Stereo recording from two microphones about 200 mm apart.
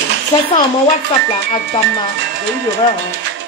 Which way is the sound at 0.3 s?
20° left (ahead or behind).